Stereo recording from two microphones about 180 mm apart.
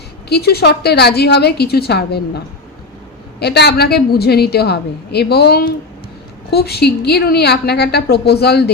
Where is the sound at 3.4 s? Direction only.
65° left (ahead or behind).